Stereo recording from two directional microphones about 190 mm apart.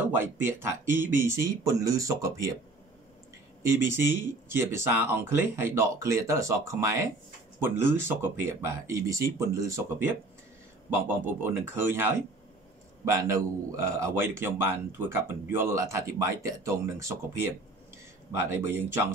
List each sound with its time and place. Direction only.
0.1 s speech: 10° right (ahead or behind)
3.6 s speech: 15° right (ahead or behind)